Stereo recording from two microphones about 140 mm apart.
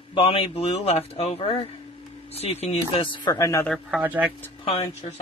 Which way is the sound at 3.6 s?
5° left (ahead or behind).